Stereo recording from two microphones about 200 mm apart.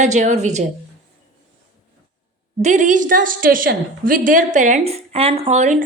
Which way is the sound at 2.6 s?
35° right (ahead or behind).